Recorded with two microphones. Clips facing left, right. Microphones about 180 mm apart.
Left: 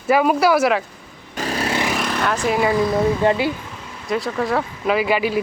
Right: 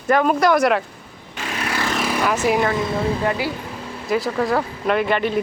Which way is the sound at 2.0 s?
5° right (ahead or behind).